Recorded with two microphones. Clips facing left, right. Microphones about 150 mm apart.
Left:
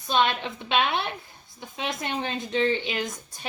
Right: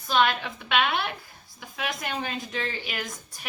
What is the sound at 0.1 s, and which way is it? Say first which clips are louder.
A woman's voice: even; 25° left (ahead or behind).